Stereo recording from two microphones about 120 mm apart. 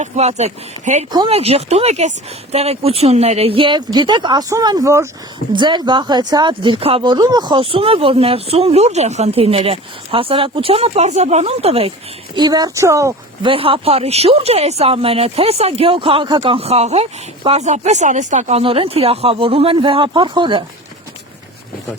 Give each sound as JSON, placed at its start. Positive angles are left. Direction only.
{"t": 0.0, "sound": "speech", "side_deg": -70}
{"t": 1.3, "sound": "speech", "side_deg": -55}
{"t": 12.4, "sound": "speech", "side_deg": -35}
{"t": 13.4, "sound": "speech", "side_deg": -50}
{"t": 18.6, "sound": "speech", "side_deg": -50}